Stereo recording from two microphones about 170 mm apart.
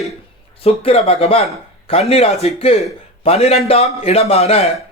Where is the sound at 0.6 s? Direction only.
35° left (ahead or behind).